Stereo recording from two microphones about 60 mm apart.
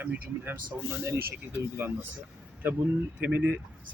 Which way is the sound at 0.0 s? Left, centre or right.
Right.